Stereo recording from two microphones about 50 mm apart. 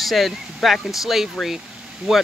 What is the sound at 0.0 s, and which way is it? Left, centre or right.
Speech, centre.